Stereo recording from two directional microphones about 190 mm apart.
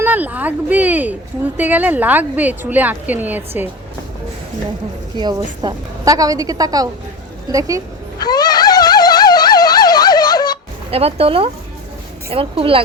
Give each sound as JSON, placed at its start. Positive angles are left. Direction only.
{"t": 0.0, "sound": "a woman's voice", "side_deg": -10}
{"t": 5.1, "sound": "a woman's voice", "side_deg": -25}
{"t": 8.2, "sound": "a sound", "side_deg": 20}
{"t": 10.9, "sound": "a woman's voice", "side_deg": -30}